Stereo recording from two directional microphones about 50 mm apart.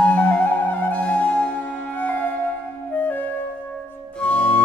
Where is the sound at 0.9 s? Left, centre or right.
Left.